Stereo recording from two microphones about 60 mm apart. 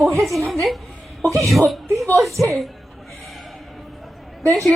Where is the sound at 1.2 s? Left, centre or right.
Right.